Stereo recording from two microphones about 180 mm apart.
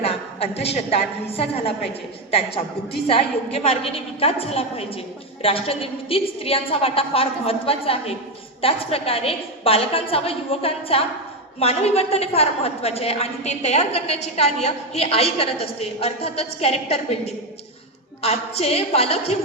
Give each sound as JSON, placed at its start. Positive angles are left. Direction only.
{"t": 0.0, "sound": "a woman's voice", "side_deg": 35}